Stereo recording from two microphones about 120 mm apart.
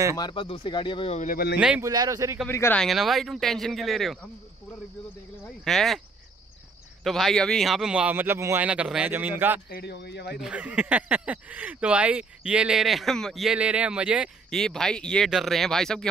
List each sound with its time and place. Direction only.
0.2 s speech: 45° left (ahead or behind)
1.8 s speech: 30° right (ahead or behind)
2.7 s a man's voice: centre (ahead or behind)
5.7 s a man's voice: centre (ahead or behind)
7.0 s a man's voice: centre (ahead or behind); by 8.6 s 20° right (ahead or behind)
8.6 s speech: 10° right (ahead or behind)
13.6 s speech: 10° right (ahead or behind)
14.5 s a man's voice: 5° left (ahead or behind)